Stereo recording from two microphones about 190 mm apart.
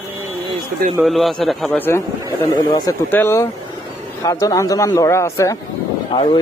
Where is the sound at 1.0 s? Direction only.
Centre (ahead or behind); by 3.0 s 20° left (ahead or behind).